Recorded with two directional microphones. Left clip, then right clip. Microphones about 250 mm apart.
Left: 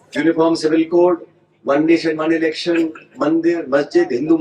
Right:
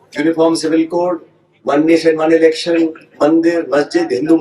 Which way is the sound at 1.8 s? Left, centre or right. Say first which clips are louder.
Right 5 dB; right.